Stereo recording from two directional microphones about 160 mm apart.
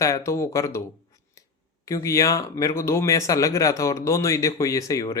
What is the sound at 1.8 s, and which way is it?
Speech, 20° left (ahead or behind).